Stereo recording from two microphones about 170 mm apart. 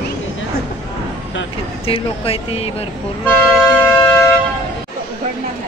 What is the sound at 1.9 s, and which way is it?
Speech, 35° left (ahead or behind).